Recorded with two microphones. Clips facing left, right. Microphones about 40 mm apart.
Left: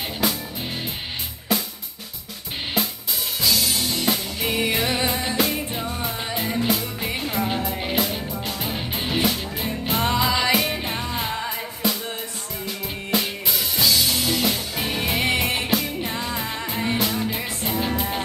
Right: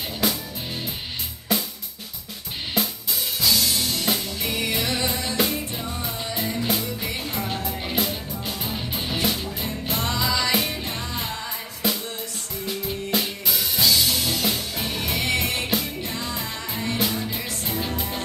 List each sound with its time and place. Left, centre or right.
3.3 s music: centre
4.4 s music: left
11.8 s music: centre
12.8 s drum kit: centre
14.1 s music: centre
16.1 s music: left